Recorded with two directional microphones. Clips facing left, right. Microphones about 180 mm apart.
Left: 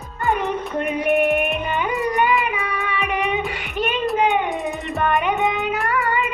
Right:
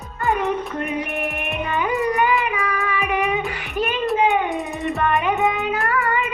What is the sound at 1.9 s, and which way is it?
Child singing, centre (ahead or behind).